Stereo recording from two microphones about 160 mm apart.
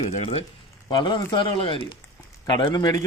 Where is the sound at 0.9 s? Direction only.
30° left (ahead or behind).